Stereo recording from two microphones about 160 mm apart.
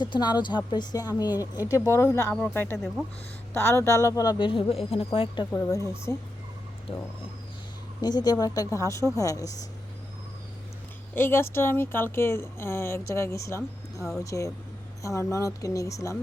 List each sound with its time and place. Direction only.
0.0 s a woman's voice: 30° left (ahead or behind)
5.5 s speech: 5° left (ahead or behind)
5.7 s speech: 15° left (ahead or behind)
8.0 s a woman's voice: 25° left (ahead or behind)
11.1 s a woman's voice: 15° left (ahead or behind)